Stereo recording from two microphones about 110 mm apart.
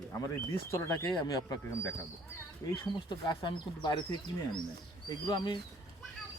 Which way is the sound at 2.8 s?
45° left (ahead or behind).